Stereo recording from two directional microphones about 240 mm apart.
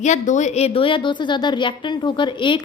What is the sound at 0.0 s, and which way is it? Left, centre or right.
A woman's voice, left.